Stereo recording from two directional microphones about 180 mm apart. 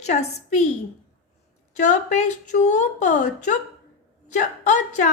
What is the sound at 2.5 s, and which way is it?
Speech, 40° left (ahead or behind).